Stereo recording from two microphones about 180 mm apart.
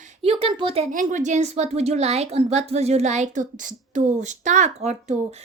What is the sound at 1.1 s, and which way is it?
A woman's voice, 40° right (ahead or behind).